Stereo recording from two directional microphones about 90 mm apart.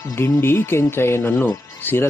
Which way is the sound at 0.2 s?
25° left (ahead or behind).